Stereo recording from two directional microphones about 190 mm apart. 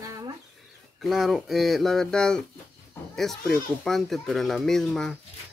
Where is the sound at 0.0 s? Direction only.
20° right (ahead or behind).